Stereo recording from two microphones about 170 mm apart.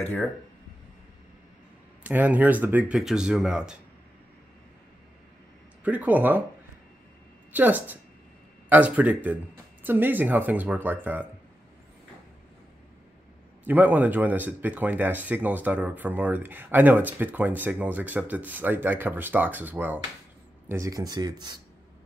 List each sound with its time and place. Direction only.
2.0 s speech: 10° right (ahead or behind)
5.9 s speech: 10° right (ahead or behind)
7.5 s speech: 10° right (ahead or behind)
13.7 s speech: 10° right (ahead or behind)